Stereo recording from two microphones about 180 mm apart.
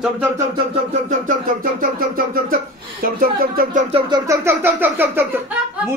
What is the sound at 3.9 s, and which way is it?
Speech, 20° right (ahead or behind).